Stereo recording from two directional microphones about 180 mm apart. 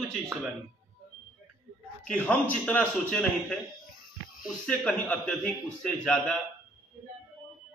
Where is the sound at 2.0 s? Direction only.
5° left (ahead or behind).